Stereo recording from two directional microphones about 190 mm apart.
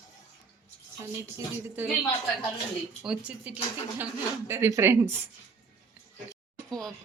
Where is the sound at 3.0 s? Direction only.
5° right (ahead or behind).